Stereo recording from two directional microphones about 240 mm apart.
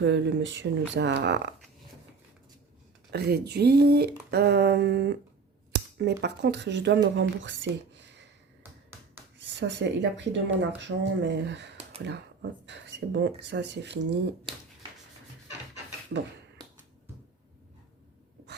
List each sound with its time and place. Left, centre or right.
0.0 s speech: right
3.1 s speech: right
9.6 s speech: right
14.5 s speech: right